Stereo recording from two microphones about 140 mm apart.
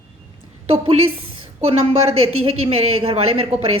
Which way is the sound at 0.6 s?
45° right (ahead or behind).